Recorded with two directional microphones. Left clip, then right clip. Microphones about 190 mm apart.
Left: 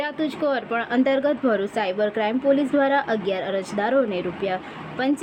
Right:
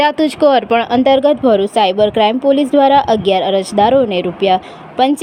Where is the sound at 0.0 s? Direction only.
35° right (ahead or behind).